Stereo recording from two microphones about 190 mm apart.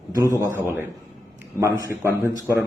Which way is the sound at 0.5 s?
10° right (ahead or behind).